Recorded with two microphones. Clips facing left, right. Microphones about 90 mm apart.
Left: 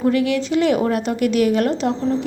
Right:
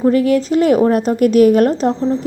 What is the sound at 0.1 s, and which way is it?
A woman's voice, 40° right (ahead or behind).